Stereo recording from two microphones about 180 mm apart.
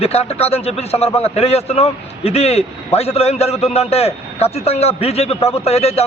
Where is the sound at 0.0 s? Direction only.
35° left (ahead or behind).